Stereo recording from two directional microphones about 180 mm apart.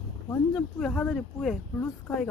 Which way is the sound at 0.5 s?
5° left (ahead or behind).